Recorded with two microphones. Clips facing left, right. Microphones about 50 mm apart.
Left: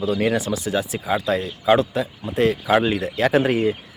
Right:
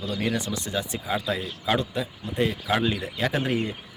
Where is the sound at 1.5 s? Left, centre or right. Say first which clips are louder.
Left 10 dB; left.